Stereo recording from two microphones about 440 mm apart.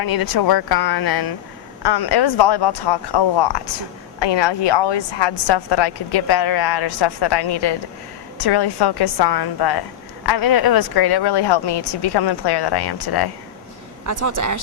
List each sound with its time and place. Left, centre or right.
0.0 s speech: left
14.0 s a woman's voice: right